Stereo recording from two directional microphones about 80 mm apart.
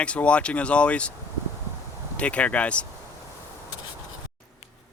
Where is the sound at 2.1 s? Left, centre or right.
Centre.